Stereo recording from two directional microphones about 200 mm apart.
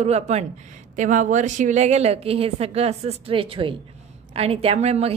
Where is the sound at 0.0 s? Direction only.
30° right (ahead or behind).